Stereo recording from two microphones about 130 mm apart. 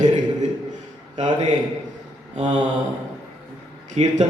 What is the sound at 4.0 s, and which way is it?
Speech, 55° right (ahead or behind).